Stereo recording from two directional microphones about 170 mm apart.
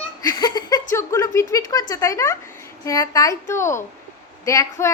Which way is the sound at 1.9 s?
20° left (ahead or behind).